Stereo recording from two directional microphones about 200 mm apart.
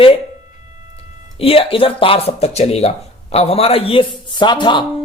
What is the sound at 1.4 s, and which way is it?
Speech, 30° left (ahead or behind).